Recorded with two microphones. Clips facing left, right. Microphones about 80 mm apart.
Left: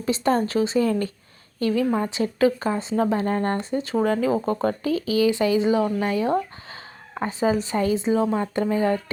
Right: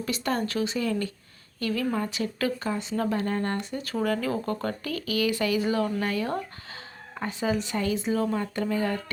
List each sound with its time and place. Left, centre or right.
0.0 s speech: left
1.5 s speech: left